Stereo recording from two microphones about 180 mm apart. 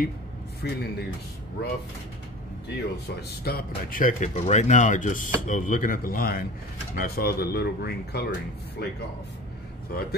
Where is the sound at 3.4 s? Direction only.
55° left (ahead or behind).